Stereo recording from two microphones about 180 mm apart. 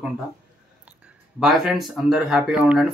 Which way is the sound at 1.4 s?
5° right (ahead or behind).